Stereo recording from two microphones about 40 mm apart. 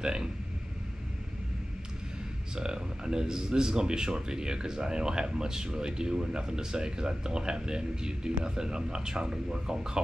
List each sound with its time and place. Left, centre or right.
0.0 s speech: centre
2.5 s speech: centre